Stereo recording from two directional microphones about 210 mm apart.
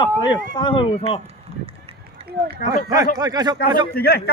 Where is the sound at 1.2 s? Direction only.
25° right (ahead or behind).